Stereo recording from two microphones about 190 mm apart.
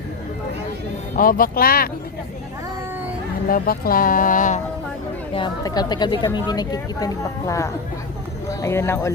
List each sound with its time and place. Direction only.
1.1 s speech: 45° left (ahead or behind)
3.5 s speech: 50° left (ahead or behind)
5.3 s speech: 25° left (ahead or behind)